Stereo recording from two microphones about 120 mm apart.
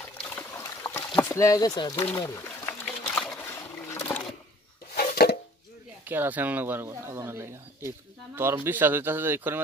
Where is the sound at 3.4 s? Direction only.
25° left (ahead or behind).